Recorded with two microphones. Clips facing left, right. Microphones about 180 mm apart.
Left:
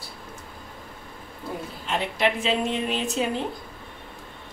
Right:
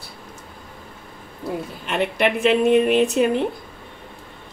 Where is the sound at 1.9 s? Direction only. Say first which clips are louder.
Right 4 dB; 65° right (ahead or behind).